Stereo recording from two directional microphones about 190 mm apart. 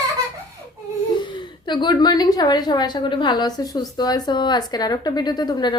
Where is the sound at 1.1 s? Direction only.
25° left (ahead or behind).